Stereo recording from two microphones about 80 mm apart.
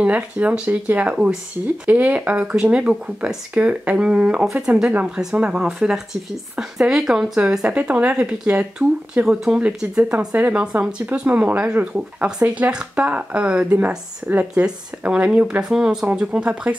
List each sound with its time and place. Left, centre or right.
0.0 s speech: centre